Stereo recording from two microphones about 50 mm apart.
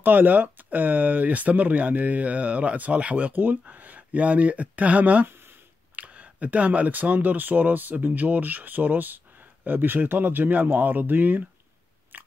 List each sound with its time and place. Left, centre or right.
0.0 s speech: right
5.3 s a sound: right
5.9 s speech: right